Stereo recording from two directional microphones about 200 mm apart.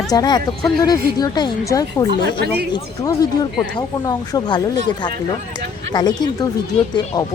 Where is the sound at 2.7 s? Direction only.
20° left (ahead or behind).